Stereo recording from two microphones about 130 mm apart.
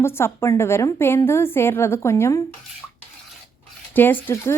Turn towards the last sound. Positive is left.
turn(degrees=20)  # may be behind; listen again after turning